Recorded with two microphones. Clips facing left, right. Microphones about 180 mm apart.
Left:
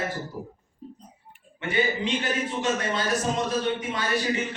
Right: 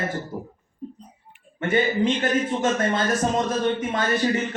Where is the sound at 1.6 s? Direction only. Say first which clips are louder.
Right 5 dB; 50° right (ahead or behind).